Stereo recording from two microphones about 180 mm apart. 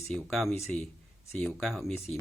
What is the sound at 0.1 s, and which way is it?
Speech, centre (ahead or behind).